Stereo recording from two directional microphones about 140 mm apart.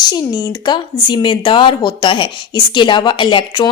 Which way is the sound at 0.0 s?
30° left (ahead or behind).